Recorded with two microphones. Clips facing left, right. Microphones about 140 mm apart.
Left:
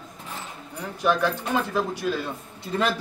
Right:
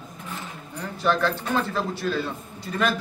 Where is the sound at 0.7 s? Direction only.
10° left (ahead or behind).